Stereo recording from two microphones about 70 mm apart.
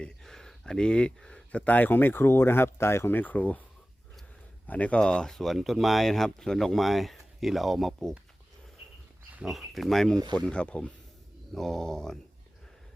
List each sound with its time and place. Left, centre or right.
0.0 s speech: centre
4.6 s speech: left; by 8.1 s centre
9.4 s speech: centre